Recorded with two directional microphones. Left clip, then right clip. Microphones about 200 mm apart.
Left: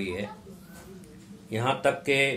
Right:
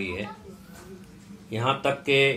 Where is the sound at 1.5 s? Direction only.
15° left (ahead or behind).